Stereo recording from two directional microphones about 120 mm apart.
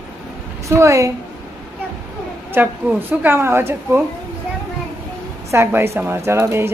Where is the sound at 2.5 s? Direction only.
15° right (ahead or behind).